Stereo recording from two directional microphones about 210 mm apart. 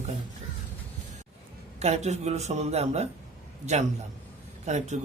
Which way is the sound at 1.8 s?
30° right (ahead or behind).